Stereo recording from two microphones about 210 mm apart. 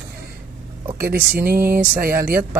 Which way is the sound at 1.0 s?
45° right (ahead or behind).